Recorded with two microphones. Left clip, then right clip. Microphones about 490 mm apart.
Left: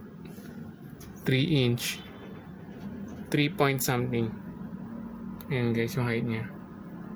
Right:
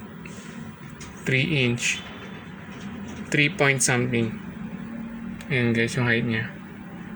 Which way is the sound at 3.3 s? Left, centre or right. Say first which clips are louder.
Right 6 dB; left.